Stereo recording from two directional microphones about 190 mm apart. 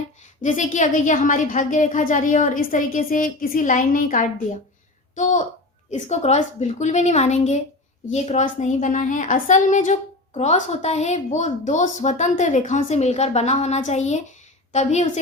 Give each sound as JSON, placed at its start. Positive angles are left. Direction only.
{"t": 0.4, "sound": "a woman's voice", "side_deg": 40}